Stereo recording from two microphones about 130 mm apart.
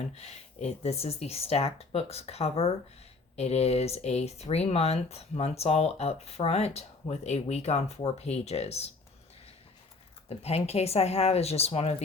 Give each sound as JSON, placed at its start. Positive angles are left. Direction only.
{"t": 0.1, "sound": "speech", "side_deg": 55}
{"t": 10.2, "sound": "speech", "side_deg": 50}